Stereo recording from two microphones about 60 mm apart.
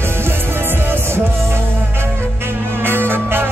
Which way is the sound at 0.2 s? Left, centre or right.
Right.